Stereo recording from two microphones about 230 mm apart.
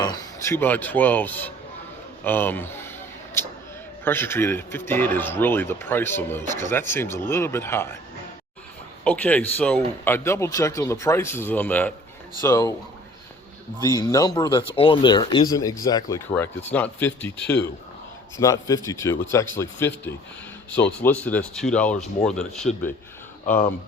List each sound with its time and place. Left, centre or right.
0.0 s speech: centre
9.0 s speech: centre
13.8 s speech: centre